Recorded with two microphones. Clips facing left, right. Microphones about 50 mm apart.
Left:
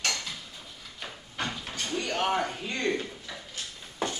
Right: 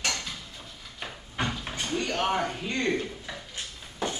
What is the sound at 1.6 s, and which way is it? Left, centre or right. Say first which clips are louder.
Door: right 2 dB; centre.